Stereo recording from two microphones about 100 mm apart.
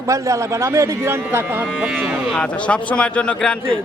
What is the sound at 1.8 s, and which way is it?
Speech, 10° right (ahead or behind).